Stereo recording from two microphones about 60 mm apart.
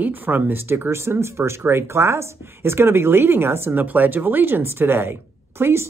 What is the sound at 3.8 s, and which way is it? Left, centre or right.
Speech, right.